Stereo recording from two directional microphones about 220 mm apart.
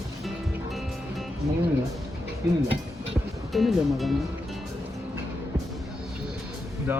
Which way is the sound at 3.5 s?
Centre (ahead or behind).